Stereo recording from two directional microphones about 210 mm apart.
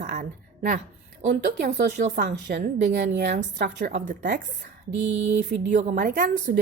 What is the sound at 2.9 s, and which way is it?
A woman's voice, 55° right (ahead or behind).